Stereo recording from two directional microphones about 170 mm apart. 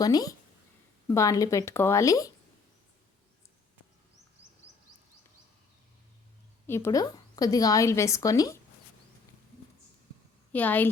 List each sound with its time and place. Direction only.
0.0 s a woman's voice: 20° left (ahead or behind)
6.7 s a woman's voice: 15° left (ahead or behind)
10.5 s a woman's voice: 10° left (ahead or behind)